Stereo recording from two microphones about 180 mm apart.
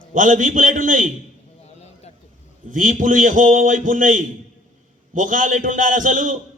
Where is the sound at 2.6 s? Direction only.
45° right (ahead or behind).